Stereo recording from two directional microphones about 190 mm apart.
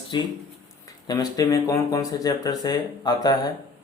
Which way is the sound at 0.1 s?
25° left (ahead or behind).